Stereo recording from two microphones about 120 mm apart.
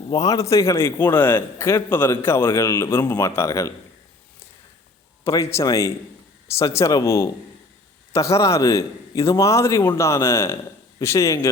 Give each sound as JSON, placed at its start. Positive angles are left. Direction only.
{"t": 0.1, "sound": "a man's voice", "side_deg": 30}
{"t": 5.2, "sound": "a man's voice", "side_deg": 25}